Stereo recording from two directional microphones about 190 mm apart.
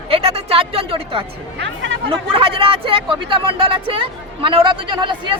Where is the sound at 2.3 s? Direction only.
30° right (ahead or behind).